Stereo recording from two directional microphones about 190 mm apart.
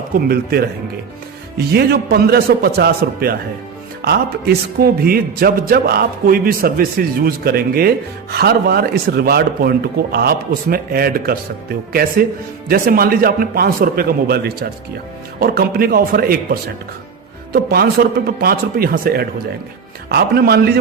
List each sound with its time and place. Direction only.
1.5 s a man's voice: 55° right (ahead or behind)
12.6 s a man's voice: 50° right (ahead or behind)